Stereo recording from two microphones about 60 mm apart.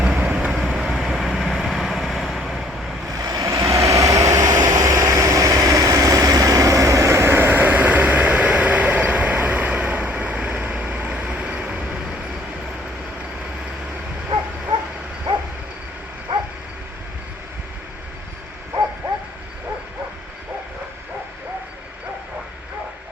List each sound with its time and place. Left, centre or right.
0.0 s vehicle: right; by 2.6 s centre
3.1 s vehicle: right